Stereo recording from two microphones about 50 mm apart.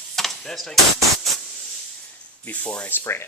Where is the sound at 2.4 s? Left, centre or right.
Left.